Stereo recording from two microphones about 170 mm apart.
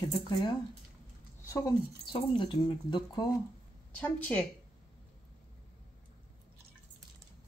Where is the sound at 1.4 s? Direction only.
15° left (ahead or behind).